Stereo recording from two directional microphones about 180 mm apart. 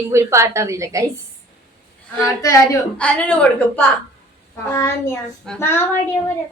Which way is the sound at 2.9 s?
5° left (ahead or behind).